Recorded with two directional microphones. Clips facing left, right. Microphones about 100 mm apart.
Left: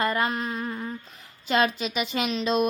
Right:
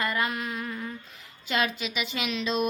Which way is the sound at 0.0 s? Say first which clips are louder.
Left 3 dB; 40° left (ahead or behind).